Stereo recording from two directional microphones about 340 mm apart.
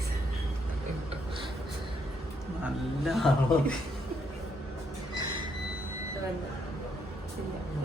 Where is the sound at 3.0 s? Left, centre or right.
Centre.